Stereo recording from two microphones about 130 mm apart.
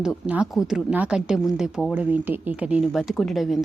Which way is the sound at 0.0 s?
10° right (ahead or behind).